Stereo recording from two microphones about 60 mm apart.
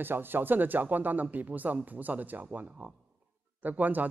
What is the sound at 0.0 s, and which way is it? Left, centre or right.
A man's voice, right.